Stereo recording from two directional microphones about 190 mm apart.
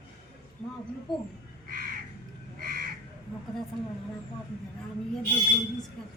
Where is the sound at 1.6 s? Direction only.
50° right (ahead or behind).